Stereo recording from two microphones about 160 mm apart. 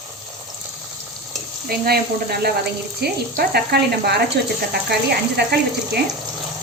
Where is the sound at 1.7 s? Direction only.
75° right (ahead or behind).